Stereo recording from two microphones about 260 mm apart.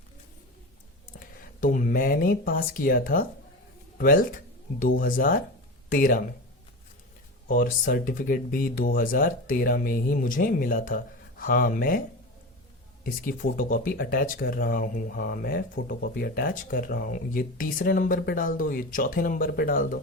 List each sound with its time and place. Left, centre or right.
1.4 s speech: left
7.4 s speech: left
13.1 s speech: left